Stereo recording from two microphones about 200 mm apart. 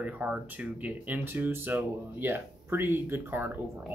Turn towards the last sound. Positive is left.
turn(degrees=-10)  # may be behind; listen again after turning